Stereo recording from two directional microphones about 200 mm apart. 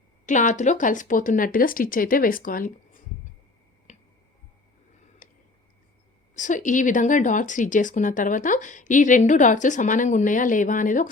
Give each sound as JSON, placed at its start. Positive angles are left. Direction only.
{"t": 0.3, "sound": "speech", "side_deg": 40}
{"t": 3.9, "sound": "finger snapping", "side_deg": 35}
{"t": 6.3, "sound": "speech", "side_deg": 40}